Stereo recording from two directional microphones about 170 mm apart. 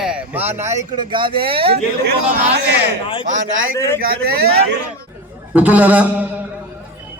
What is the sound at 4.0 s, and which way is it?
Speech, 65° right (ahead or behind).